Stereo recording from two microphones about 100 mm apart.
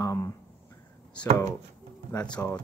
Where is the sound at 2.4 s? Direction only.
20° left (ahead or behind).